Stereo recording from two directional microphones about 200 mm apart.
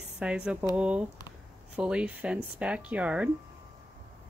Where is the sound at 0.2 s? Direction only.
5° right (ahead or behind).